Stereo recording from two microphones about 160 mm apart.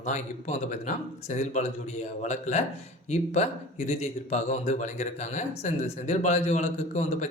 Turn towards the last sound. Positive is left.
turn(degrees=45)  # may be behind; listen again after turning